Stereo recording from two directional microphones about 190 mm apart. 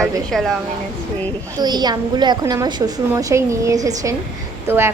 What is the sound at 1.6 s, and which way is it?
A woman's voice, 20° right (ahead or behind).